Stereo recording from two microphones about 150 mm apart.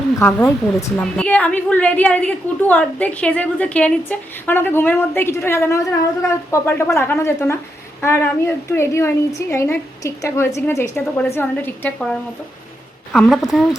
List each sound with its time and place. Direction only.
0.2 s a woman's voice: 15° left (ahead or behind)
13.1 s a woman's voice: centre (ahead or behind)